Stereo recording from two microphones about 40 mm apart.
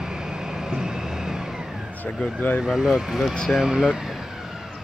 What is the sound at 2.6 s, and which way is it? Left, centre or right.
Speech, centre.